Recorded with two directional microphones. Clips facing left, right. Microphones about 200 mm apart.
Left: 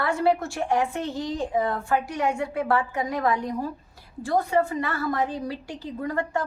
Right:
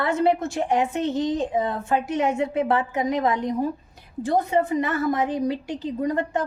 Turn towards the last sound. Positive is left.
turn(degrees=-20)  # may be behind; listen again after turning